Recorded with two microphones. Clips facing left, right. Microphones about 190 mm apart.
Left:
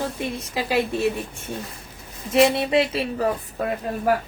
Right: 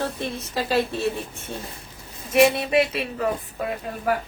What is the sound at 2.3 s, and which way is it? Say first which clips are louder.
A woman's voice: even; 25° left (ahead or behind).